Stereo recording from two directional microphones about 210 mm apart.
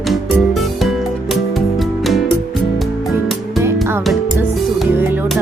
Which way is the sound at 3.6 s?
10° right (ahead or behind).